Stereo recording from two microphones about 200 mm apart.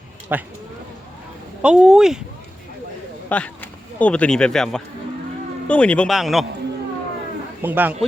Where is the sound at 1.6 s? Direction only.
5° right (ahead or behind).